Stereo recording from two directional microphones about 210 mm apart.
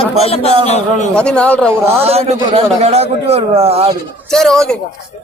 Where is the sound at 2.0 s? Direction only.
30° right (ahead or behind).